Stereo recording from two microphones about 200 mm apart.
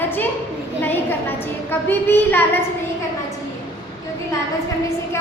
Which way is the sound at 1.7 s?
10° left (ahead or behind).